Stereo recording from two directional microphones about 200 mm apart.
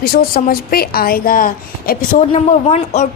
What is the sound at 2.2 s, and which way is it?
Speech, 35° left (ahead or behind).